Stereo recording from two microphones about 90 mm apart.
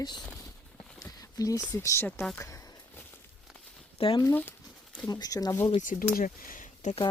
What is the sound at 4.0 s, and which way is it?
Speech, 90° left.